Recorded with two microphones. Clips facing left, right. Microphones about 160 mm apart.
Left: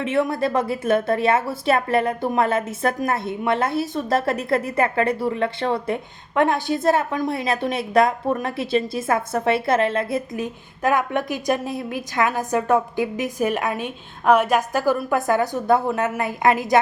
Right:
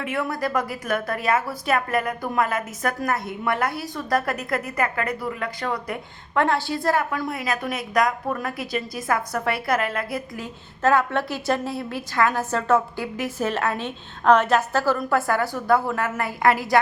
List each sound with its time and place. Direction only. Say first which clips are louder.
0.0 s a woman's voice: left 5 dB; 25° left (ahead or behind)